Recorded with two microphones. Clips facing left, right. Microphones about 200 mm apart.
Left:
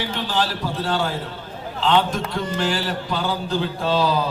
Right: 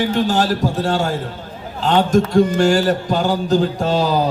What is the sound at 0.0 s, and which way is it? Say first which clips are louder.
Music: right 7 dB; 45° right (ahead or behind).